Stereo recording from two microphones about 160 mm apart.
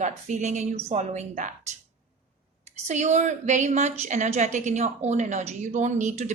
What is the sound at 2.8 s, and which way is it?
A woman's voice, 45° right (ahead or behind).